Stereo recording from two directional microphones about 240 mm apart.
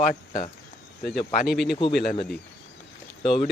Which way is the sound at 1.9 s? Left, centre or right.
Left.